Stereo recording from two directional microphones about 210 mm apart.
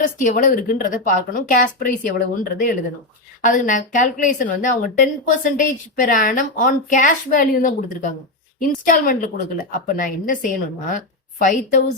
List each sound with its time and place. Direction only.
0.0 s a woman's voice: 40° left (ahead or behind)